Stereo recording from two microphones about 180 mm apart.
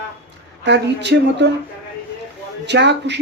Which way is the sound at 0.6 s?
75° right (ahead or behind).